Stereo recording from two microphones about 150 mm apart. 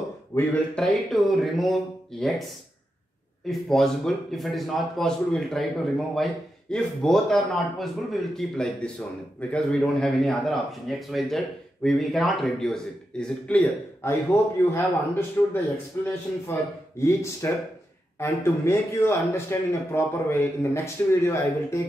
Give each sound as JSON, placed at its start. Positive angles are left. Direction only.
{"t": 0.3, "sound": "speech", "side_deg": 20}
{"t": 0.7, "sound": "a man's voice", "side_deg": 0}
{"t": 3.4, "sound": "a man's voice", "side_deg": 5}